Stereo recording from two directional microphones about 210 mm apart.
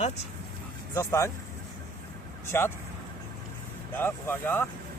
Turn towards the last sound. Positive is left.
turn(degrees=10)  # may be behind; listen again after turning